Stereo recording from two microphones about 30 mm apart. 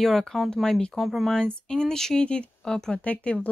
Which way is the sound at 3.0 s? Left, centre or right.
Left.